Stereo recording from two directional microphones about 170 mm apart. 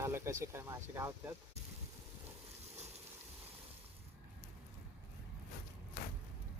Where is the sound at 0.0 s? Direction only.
15° right (ahead or behind).